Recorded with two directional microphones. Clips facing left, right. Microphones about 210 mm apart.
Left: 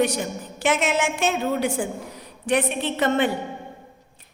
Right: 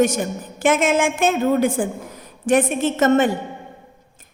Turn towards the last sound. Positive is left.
turn(degrees=-45)  # may be behind; listen again after turning